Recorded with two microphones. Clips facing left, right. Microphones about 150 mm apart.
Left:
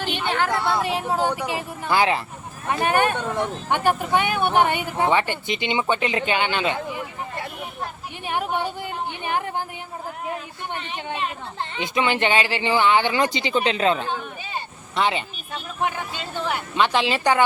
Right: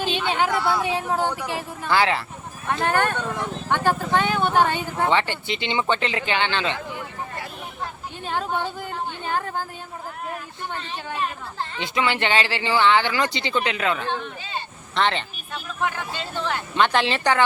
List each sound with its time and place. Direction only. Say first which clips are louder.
0.3 s speech: left 1 dB; 15° right (ahead or behind)
0.8 s speech: even; 5° left (ahead or behind)
1.1 s speech: left 1 dB; 15° left (ahead or behind)
8.2 s speech: left 1 dB; 15° left (ahead or behind)
13.7 s speech: left 4 dB; 25° left (ahead or behind)
14.1 s a sound: even; 10° left (ahead or behind)
15.8 s speech: left 1 dB; 15° left (ahead or behind)
17.2 s speech: left 1 dB; 15° left (ahead or behind)